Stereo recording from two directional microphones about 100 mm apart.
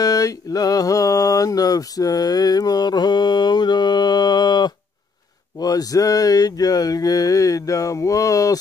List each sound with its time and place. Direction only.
0.0 s mantra: 35° left (ahead or behind)